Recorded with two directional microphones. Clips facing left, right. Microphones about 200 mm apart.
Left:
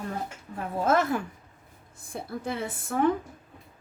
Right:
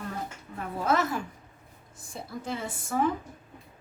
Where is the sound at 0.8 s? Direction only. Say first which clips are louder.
Left 3 dB; 50° left (ahead or behind).